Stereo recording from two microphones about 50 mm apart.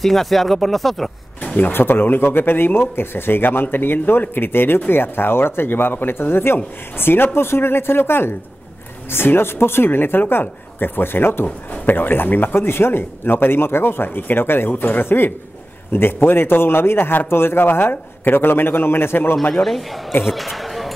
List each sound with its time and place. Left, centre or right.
0.0 s speech: centre
1.6 s speech: left
11.4 s speech: left
19.5 s speech: centre